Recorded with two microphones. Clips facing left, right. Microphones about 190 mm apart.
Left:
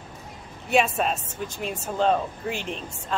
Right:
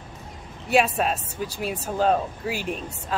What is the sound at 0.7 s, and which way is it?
Speech, centre (ahead or behind).